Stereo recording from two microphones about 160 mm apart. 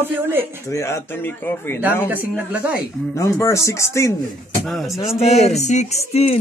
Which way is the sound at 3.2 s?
20° left (ahead or behind).